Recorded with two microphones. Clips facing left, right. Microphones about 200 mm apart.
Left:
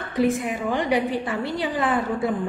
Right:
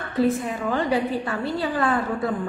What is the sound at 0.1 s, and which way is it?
A woman's voice, 15° left (ahead or behind).